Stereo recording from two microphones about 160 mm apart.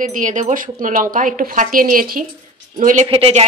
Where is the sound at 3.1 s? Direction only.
40° right (ahead or behind).